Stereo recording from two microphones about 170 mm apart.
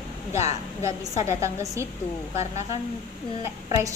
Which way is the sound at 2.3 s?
40° left (ahead or behind).